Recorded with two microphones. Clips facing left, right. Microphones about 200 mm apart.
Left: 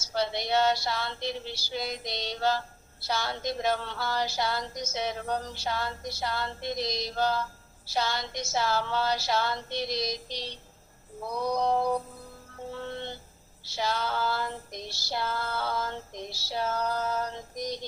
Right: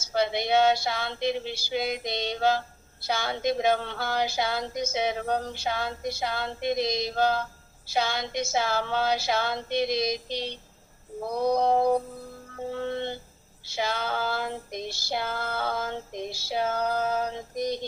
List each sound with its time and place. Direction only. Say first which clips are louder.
0.1 s female singing: right 4 dB; 55° right (ahead or behind)
12.5 s music: right 6 dB; 60° right (ahead or behind)
13.7 s female singing: right 1 dB; 55° right (ahead or behind)